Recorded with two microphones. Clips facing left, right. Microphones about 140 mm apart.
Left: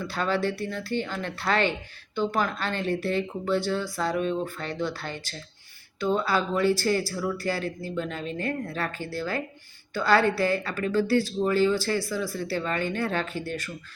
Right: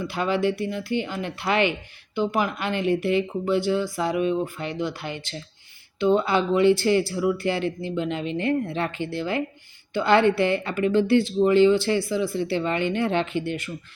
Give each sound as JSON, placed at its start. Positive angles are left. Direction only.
{"t": 0.0, "sound": "speech", "side_deg": -15}